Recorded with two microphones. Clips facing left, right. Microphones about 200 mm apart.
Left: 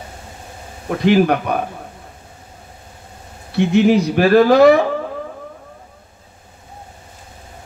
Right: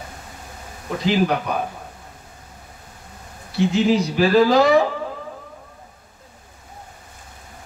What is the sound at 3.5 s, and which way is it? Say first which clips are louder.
Speech: left 4 dB; 60° left (ahead or behind).